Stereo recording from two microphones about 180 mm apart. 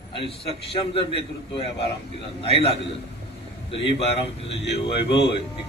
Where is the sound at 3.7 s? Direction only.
30° left (ahead or behind).